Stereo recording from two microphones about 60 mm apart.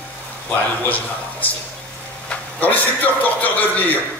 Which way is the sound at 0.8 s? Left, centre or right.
Left.